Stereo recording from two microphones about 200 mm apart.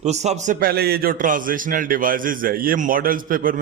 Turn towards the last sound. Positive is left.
turn(degrees=-45)  # may be behind; listen again after turning